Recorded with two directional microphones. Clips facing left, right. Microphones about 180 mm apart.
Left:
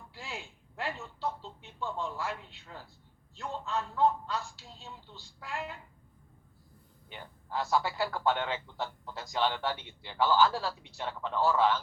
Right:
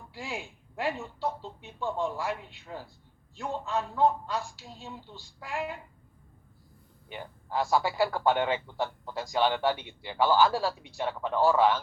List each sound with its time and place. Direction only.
0.1 s a man's voice: 10° right (ahead or behind)
7.1 s a man's voice: 10° right (ahead or behind)